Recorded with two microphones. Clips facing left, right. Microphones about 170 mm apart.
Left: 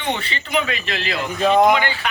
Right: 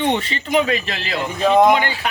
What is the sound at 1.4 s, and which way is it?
Speech, 5° right (ahead or behind).